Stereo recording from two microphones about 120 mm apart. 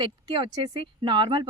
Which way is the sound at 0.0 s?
45° right (ahead or behind).